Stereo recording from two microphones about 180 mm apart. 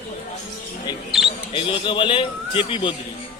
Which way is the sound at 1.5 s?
30° left (ahead or behind).